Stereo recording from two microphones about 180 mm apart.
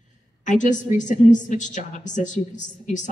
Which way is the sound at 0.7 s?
45° left (ahead or behind).